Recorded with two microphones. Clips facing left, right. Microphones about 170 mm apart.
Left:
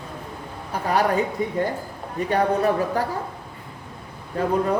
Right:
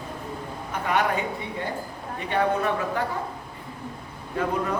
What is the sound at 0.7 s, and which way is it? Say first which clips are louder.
Speech: left 3 dB; 35° left (ahead or behind).